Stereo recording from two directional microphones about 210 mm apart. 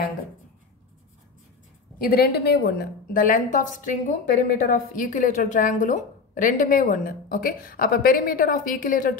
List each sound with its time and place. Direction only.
2.0 s a woman's voice: 45° left (ahead or behind)